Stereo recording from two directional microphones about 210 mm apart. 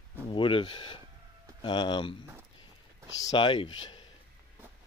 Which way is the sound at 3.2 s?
20° left (ahead or behind).